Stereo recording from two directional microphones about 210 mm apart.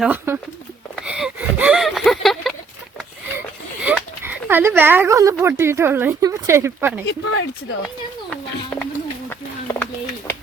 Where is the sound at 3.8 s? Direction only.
10° right (ahead or behind).